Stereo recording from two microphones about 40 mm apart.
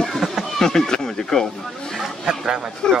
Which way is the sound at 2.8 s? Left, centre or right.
Left.